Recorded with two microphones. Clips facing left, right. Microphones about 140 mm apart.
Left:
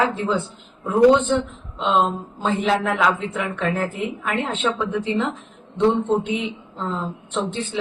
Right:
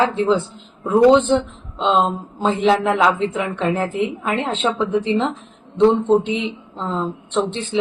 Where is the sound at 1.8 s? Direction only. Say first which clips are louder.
Right 2 dB; 30° right (ahead or behind).